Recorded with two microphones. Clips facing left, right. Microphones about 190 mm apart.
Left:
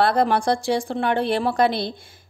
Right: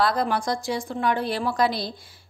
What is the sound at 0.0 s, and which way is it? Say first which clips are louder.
A woman's voice: left 4 dB; 60° left (ahead or behind).